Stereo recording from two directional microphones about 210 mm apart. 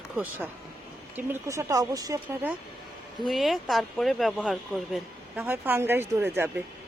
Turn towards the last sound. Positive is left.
turn(degrees=-10)  # may be behind; listen again after turning